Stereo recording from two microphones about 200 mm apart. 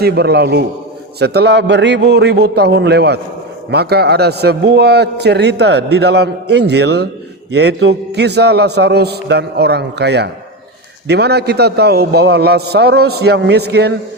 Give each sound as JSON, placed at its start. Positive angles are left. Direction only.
{"t": 0.0, "sound": "a man's voice", "side_deg": -55}